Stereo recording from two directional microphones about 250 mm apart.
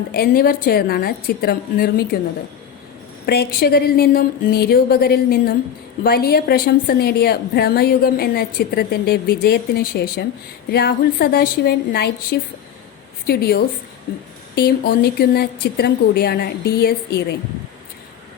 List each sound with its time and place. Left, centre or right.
0.1 s a woman's voice: left
3.2 s a woman's voice: left